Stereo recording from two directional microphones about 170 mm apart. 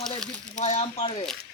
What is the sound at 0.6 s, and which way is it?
Speech, 40° left (ahead or behind).